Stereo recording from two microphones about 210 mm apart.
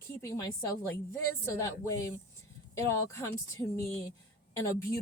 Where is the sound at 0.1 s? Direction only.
15° left (ahead or behind).